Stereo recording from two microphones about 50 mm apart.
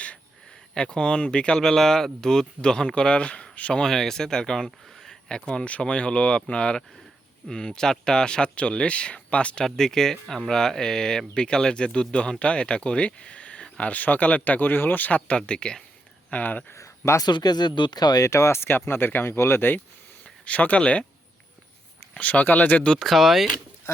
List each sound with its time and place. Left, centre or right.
0.7 s speech: centre
1.5 s speech: centre; by 3.8 s left
3.8 s speech: centre
5.5 s speech: left
9.6 s speech: centre; by 15.2 s left
15.3 s speech: centre
16.3 s speech: left
16.7 s a sound: left
18.2 s speech: left
18.6 s speech: left
20.2 s speech: left
22.2 s speech: left
23.0 s speech: centre